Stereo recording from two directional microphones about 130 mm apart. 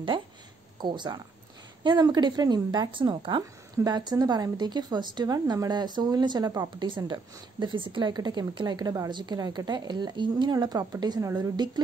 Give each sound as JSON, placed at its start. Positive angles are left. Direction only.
{"t": 0.7, "sound": "a woman's voice", "side_deg": -35}